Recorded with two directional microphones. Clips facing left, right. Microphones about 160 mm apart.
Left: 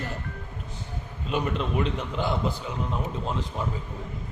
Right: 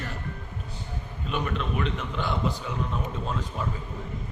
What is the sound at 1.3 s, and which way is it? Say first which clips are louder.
A man's voice: left 2 dB; 25° left (ahead or behind).